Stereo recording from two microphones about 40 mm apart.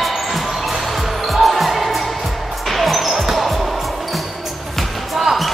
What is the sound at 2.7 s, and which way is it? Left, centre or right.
Basketball bounce, centre.